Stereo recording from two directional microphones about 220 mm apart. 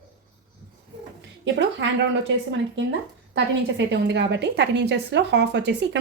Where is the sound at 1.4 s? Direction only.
55° right (ahead or behind).